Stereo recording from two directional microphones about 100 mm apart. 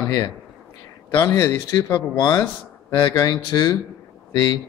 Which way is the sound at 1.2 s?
35° left (ahead or behind).